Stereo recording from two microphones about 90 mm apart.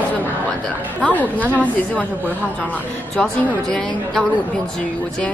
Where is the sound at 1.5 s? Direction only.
15° left (ahead or behind).